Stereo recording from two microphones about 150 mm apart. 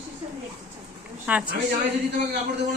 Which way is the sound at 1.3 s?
10° right (ahead or behind).